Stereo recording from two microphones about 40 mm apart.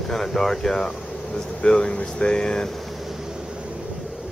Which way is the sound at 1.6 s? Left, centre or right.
Left.